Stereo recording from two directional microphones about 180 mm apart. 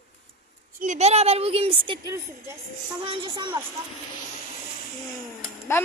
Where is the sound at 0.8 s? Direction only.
40° right (ahead or behind).